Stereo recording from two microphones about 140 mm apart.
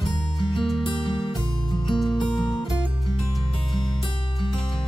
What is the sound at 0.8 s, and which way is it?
Music, 35° left (ahead or behind).